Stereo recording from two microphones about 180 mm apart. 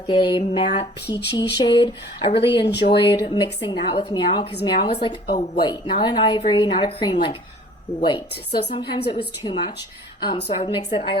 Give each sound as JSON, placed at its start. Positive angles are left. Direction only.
{"t": 0.1, "sound": "a woman's voice", "side_deg": 25}
{"t": 1.1, "sound": "a woman's voice", "side_deg": 25}
{"t": 10.3, "sound": "a woman's voice", "side_deg": 35}